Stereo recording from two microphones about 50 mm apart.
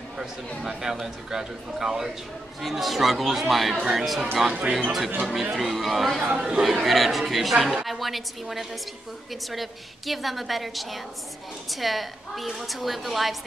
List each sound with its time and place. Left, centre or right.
0.6 s a man's voice: centre
4.5 s speech: right
5.2 s speech: centre
6.3 s speech: centre